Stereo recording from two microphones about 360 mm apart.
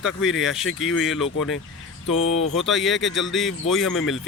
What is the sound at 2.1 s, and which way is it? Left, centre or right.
Speech, left.